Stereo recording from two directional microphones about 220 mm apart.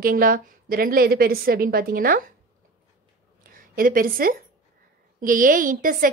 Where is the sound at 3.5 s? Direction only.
40° right (ahead or behind).